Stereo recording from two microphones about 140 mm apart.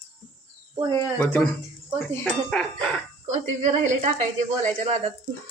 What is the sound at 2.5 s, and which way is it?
Speech, centre (ahead or behind).